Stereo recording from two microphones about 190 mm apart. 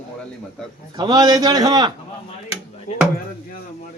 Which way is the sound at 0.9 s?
20° right (ahead or behind).